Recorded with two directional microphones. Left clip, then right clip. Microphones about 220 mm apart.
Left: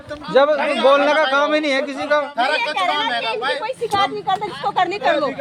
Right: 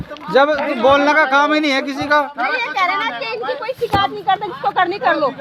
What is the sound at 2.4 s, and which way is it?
Speech, 60° left (ahead or behind).